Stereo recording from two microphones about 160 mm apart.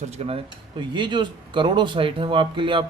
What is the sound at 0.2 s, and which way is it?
Speech, 45° right (ahead or behind).